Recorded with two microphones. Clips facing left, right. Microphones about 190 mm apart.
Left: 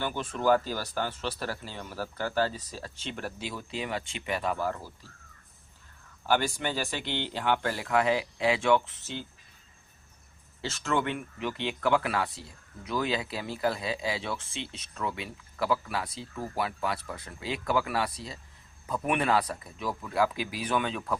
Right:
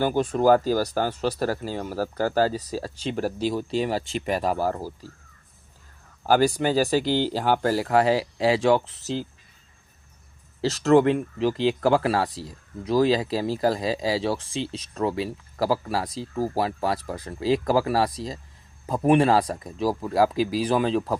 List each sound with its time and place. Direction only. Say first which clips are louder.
0.0 s speech: right 8 dB; 40° right (ahead or behind)
6.2 s speech: right 8 dB; 40° right (ahead or behind)
10.6 s speech: right 12 dB; 35° right (ahead or behind)